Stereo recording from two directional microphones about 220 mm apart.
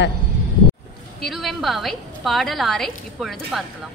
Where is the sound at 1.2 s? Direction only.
Centre (ahead or behind).